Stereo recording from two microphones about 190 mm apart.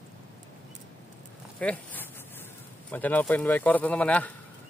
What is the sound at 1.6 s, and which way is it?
A man's voice, 10° left (ahead or behind).